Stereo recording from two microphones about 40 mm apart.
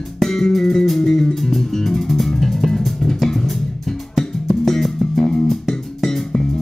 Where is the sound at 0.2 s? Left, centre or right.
Centre.